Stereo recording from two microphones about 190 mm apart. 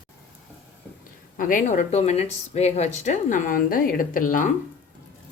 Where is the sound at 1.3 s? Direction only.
45° left (ahead or behind).